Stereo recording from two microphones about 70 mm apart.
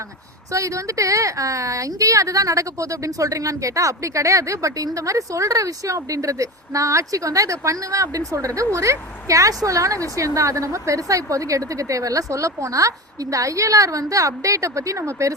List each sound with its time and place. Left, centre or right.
0.5 s a woman's voice: right